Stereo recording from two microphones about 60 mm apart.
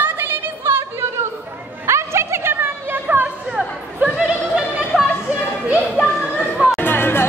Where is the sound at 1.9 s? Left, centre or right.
Right.